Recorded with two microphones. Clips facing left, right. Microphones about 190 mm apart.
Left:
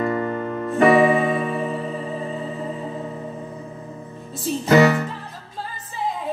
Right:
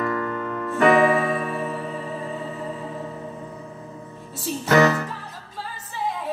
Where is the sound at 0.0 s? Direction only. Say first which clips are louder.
Left 3 dB; 25° left (ahead or behind).